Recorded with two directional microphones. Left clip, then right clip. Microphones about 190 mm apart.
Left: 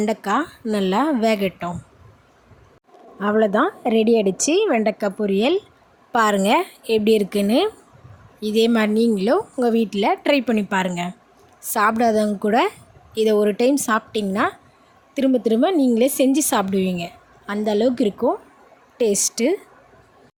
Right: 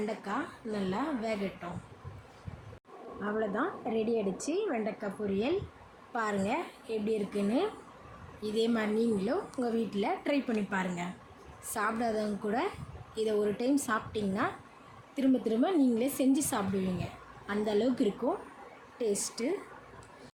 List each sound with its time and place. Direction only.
0.0 s a woman's voice: 65° left (ahead or behind)
3.2 s a woman's voice: 55° left (ahead or behind)